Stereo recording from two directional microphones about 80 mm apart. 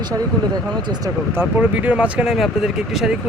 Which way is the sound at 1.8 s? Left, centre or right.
Centre.